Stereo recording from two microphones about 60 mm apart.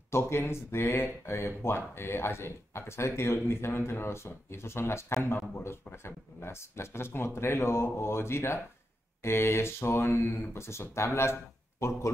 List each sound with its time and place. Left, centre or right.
0.1 s speech: left